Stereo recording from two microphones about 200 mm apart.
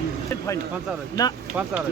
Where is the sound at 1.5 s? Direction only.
10° right (ahead or behind).